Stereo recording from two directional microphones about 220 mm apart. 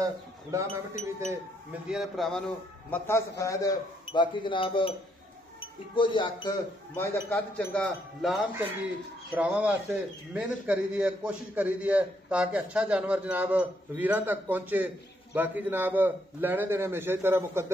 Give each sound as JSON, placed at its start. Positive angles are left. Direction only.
{"t": 0.0, "sound": "speech", "side_deg": -15}
{"t": 0.7, "sound": "speech", "side_deg": 35}
{"t": 1.3, "sound": "speech", "side_deg": -5}
{"t": 2.9, "sound": "a man's voice", "side_deg": 15}
{"t": 7.0, "sound": "a man's voice", "side_deg": 10}